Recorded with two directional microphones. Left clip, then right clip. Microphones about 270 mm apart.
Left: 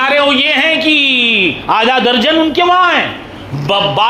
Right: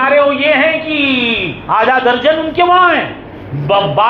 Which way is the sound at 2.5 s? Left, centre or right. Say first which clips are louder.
Right 3 dB; left.